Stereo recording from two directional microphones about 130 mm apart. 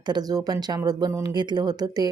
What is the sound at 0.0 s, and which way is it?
A woman's voice, 30° right (ahead or behind).